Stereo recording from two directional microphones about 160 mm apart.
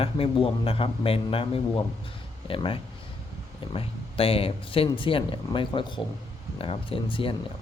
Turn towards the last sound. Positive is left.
turn(degrees=35)  # may be behind; listen again after turning